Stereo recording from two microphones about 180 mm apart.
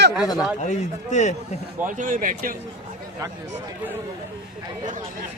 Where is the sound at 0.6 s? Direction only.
40° left (ahead or behind).